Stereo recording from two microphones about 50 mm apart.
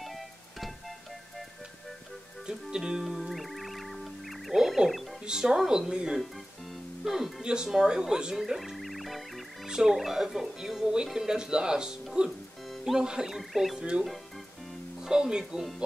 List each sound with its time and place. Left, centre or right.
0.0 s music: centre
2.4 s music: centre
5.2 s speech: centre
7.1 s speech: centre
8.4 s music: centre
9.7 s speech: centre
12.7 s music: centre
13.0 s speech: centre
13.3 s speech: centre
13.7 s speech: centre